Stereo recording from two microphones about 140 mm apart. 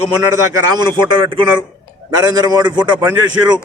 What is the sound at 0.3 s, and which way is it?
A man's voice, 30° right (ahead or behind).